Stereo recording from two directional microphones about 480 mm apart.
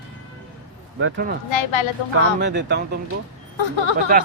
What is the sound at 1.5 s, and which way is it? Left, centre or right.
Speech, left.